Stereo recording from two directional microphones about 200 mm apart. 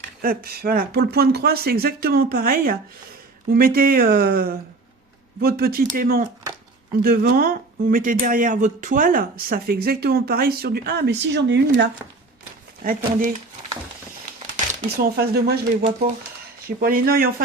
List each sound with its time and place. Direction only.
0.2 s speech: 45° right (ahead or behind)
14.5 s a sound: 35° right (ahead or behind)
14.8 s speech: 50° right (ahead or behind)